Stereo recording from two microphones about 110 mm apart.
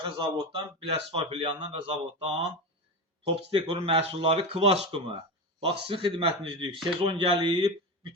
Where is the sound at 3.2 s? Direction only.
55° right (ahead or behind).